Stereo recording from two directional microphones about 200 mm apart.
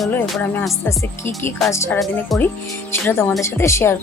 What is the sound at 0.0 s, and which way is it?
Music, 5° left (ahead or behind).